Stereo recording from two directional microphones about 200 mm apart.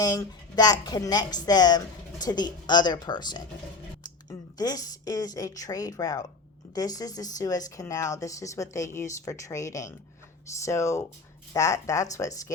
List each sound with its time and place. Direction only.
0.0 s a woman's voice: 20° left (ahead or behind)